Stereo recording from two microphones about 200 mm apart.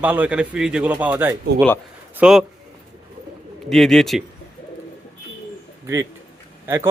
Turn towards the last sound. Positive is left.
turn(degrees=-15)  # may be behind; listen again after turning